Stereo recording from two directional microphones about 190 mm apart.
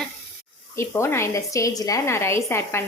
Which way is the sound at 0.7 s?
15° left (ahead or behind).